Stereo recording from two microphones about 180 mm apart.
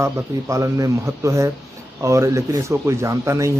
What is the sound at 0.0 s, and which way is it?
Speech, 15° right (ahead or behind).